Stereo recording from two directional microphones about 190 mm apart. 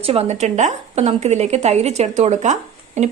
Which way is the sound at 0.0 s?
30° right (ahead or behind).